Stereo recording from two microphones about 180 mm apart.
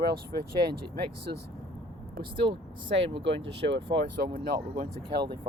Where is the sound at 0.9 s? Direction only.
65° right (ahead or behind).